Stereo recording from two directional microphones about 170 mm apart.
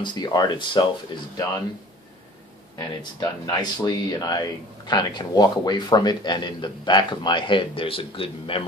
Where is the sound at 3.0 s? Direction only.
25° left (ahead or behind).